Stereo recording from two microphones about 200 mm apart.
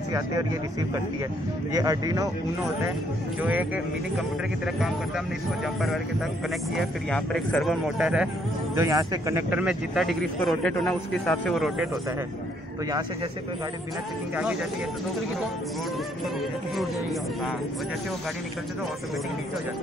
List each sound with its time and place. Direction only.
1.7 s speech: 20° right (ahead or behind)
3.4 s speech: 10° right (ahead or behind)
6.8 s speech: 5° left (ahead or behind)
8.7 s speech: 15° right (ahead or behind); by 11.9 s centre (ahead or behind)